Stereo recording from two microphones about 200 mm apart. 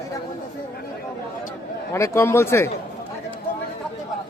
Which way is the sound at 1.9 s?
15° left (ahead or behind).